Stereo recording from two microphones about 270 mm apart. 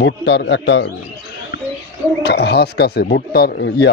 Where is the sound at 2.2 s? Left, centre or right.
Left.